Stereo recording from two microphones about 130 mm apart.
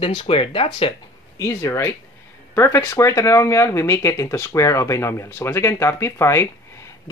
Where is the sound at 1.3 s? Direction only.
25° left (ahead or behind).